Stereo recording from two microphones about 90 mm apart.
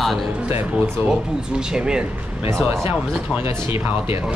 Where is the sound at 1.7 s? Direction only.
10° right (ahead or behind).